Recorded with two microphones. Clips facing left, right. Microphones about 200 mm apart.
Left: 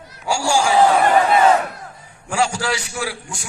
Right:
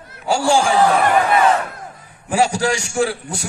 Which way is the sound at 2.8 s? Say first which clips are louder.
Right 8 dB; 50° right (ahead or behind).